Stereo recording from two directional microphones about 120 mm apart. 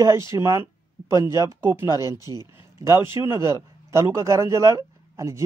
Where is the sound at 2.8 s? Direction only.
20° right (ahead or behind).